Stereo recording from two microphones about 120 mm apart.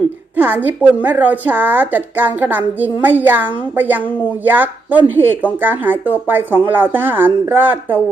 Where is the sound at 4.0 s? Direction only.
15° left (ahead or behind).